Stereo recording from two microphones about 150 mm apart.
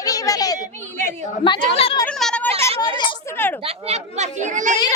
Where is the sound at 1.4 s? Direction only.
35° left (ahead or behind).